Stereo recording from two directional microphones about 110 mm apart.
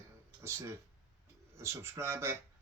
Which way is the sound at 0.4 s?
25° right (ahead or behind).